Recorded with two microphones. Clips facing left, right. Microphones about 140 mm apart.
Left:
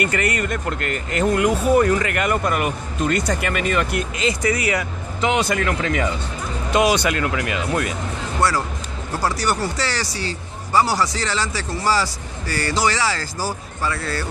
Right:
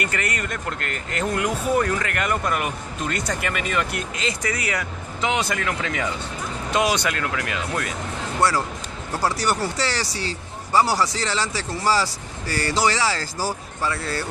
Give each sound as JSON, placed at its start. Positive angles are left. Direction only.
{"t": 0.0, "sound": "speech", "side_deg": 5}
{"t": 8.4, "sound": "speech", "side_deg": -25}